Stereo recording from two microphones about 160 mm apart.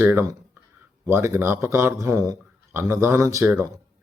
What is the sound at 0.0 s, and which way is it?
A man's voice, 15° right (ahead or behind).